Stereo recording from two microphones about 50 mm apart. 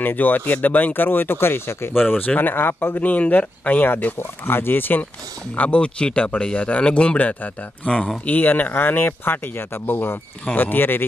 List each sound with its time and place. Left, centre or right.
0.0 s speech: left
2.0 s speech: left
2.8 s speech: left
5.6 s speech: left